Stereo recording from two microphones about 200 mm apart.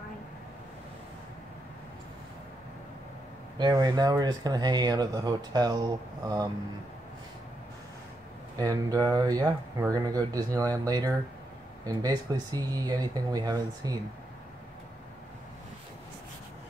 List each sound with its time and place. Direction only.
3.5 s speech: 20° right (ahead or behind)
8.5 s speech: 20° right (ahead or behind)